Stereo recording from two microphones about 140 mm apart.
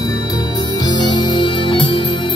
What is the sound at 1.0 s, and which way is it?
Music, 35° left (ahead or behind).